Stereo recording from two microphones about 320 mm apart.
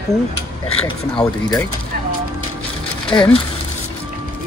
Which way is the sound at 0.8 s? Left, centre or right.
Centre.